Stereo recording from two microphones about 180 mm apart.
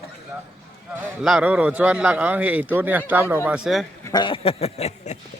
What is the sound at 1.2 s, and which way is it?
A man's voice, 5° right (ahead or behind).